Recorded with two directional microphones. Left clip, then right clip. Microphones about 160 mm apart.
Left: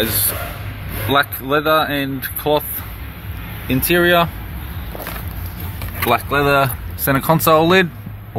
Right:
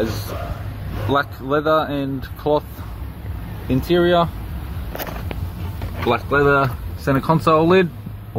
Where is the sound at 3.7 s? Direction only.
5° left (ahead or behind).